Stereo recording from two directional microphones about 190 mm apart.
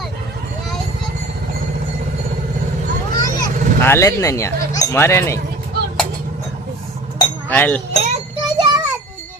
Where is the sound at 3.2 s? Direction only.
15° left (ahead or behind).